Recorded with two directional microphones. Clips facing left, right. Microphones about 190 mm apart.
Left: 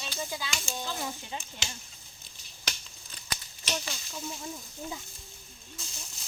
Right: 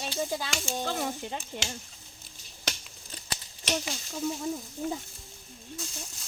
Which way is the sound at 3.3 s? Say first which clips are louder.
Right 4 dB; 30° right (ahead or behind).